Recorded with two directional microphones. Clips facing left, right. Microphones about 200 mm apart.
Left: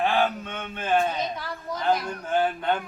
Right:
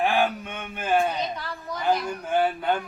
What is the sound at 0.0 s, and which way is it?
Mantra, 10° right (ahead or behind).